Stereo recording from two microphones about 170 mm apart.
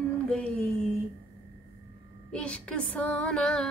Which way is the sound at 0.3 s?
5° left (ahead or behind).